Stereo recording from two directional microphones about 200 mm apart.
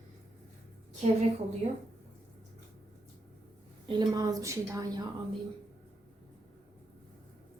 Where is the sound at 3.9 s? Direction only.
20° right (ahead or behind).